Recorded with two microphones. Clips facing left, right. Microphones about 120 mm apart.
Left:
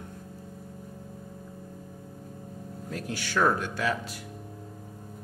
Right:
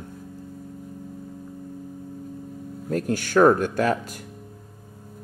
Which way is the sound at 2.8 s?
45° right (ahead or behind).